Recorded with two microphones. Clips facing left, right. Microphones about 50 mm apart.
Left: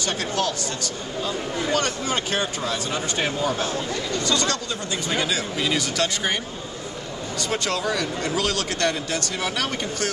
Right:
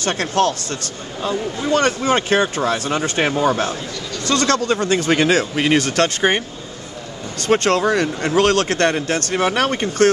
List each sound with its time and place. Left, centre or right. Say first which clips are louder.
0.0 s speech: right 7 dB; right
4.3 s speech: right 11 dB; right
7.4 s speech: right 10 dB; right